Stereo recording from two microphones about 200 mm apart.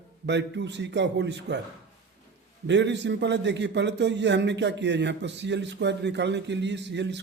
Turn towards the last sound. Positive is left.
turn(degrees=-60)  # may be behind; listen again after turning